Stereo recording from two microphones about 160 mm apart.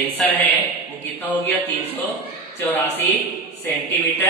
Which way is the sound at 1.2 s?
10° left (ahead or behind).